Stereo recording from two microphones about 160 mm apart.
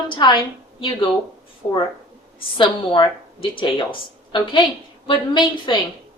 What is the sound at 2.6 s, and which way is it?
Speech, 30° left (ahead or behind).